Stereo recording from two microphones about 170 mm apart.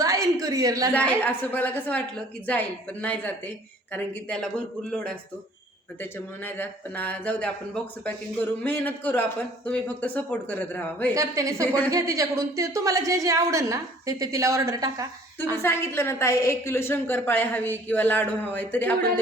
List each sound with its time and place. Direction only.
0.0 s a sound: 20° right (ahead or behind)
1.2 s a woman's voice: 10° left (ahead or behind)
11.1 s a woman's voice: 20° right (ahead or behind)
15.6 s a woman's voice: 15° left (ahead or behind)